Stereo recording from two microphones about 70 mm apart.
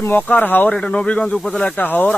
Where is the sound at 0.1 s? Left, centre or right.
Left.